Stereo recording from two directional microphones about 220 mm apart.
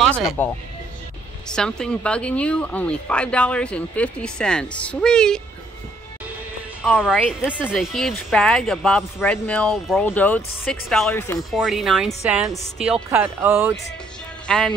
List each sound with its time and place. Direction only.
0.0 s speech: centre (ahead or behind)
1.5 s a woman's voice: 5° left (ahead or behind)
6.8 s a woman's voice: centre (ahead or behind)
11.5 s a woman's voice: centre (ahead or behind)
14.5 s a woman's voice: centre (ahead or behind)